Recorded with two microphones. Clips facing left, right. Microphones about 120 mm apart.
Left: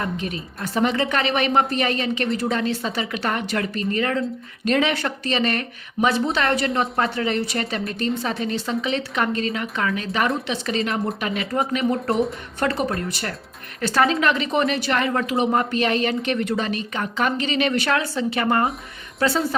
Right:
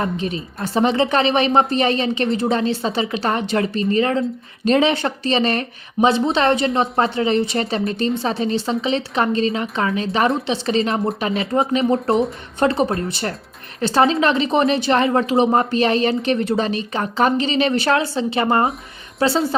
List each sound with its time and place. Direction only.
0.0 s speech: 30° right (ahead or behind)